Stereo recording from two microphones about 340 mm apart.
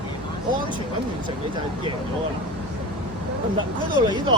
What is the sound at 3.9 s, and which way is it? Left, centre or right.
Speech, centre.